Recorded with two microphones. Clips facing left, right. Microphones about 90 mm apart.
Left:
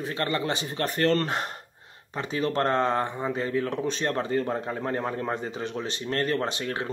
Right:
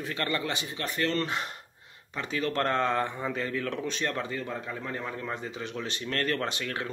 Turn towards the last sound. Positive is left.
turn(degrees=30)  # may be behind; listen again after turning